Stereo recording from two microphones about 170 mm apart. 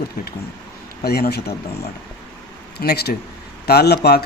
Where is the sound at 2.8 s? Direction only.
70° left (ahead or behind).